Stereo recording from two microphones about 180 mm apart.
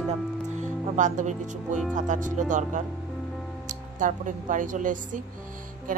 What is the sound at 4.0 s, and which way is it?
Speech, 45° right (ahead or behind).